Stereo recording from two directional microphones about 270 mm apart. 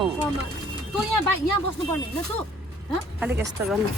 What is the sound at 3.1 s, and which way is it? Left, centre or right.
Speech, centre.